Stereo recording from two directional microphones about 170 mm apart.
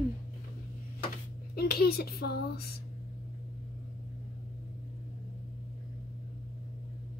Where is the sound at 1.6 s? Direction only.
70° left (ahead or behind).